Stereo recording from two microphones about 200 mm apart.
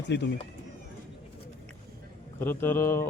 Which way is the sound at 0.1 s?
55° left (ahead or behind).